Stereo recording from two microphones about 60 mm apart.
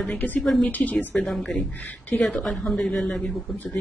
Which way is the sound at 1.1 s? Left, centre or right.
Centre.